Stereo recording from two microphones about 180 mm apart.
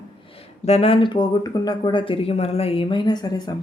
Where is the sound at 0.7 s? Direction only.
35° left (ahead or behind).